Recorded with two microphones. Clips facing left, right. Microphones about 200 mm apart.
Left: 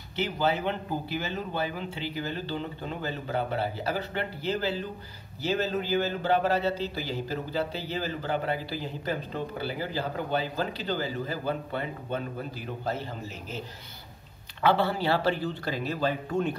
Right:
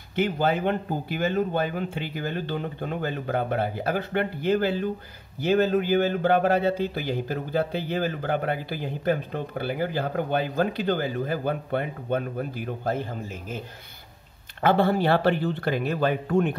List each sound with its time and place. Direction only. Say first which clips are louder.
0.1 s a man's voice: right 4 dB; 50° right (ahead or behind)
14.6 s speech: right 4 dB; 50° right (ahead or behind)